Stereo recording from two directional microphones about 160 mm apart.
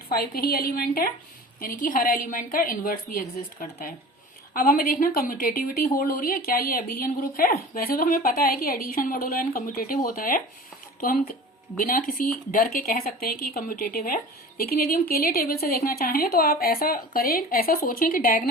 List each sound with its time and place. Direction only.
0.1 s a woman's voice: 75° left (ahead or behind)